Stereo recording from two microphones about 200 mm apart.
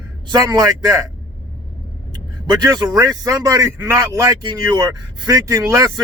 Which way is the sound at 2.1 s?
20° right (ahead or behind).